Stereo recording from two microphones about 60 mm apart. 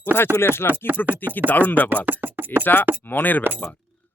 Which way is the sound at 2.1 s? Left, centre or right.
Right.